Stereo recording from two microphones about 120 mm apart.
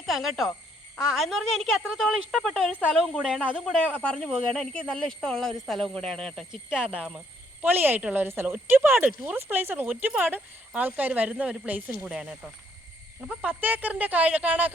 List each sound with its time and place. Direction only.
0.0 s speech: centre (ahead or behind)
3.2 s speech: 5° right (ahead or behind)
4.1 s speech: 5° left (ahead or behind)
7.6 s speech: 15° right (ahead or behind)